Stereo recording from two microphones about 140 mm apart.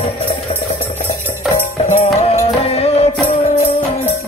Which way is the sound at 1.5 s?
45° left (ahead or behind).